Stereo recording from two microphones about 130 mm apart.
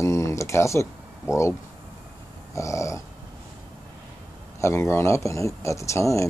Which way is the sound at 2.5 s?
25° left (ahead or behind).